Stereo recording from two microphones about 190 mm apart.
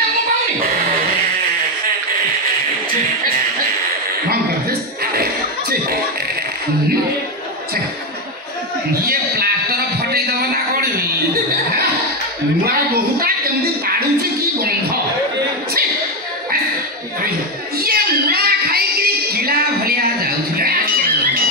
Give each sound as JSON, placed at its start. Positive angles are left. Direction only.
{"t": 4.3, "sound": "chuckle", "side_deg": -55}
{"t": 9.0, "sound": "music", "side_deg": -55}
{"t": 12.6, "sound": "music", "side_deg": -55}
{"t": 17.7, "sound": "music", "side_deg": -55}